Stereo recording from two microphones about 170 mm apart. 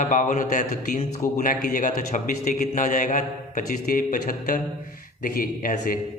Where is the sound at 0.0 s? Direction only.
45° left (ahead or behind).